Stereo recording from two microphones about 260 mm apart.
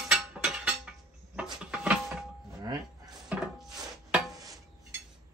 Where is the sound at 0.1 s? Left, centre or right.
Centre.